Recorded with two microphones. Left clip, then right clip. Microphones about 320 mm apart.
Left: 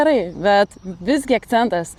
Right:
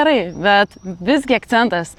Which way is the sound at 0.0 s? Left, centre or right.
Centre.